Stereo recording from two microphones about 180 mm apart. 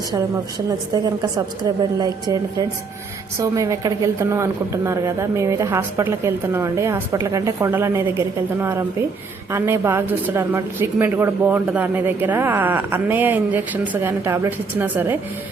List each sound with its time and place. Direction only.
1.0 s a woman's voice: 20° right (ahead or behind)